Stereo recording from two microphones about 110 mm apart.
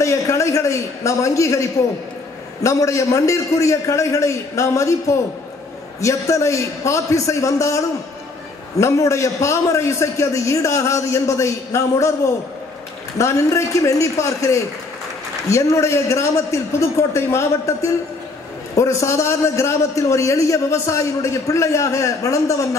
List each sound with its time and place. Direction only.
0.0 s a sound: 30° left (ahead or behind)
2.6 s a man's voice: 30° left (ahead or behind)
5.9 s a man's voice: 30° left (ahead or behind)
13.2 s a man's voice: 25° left (ahead or behind)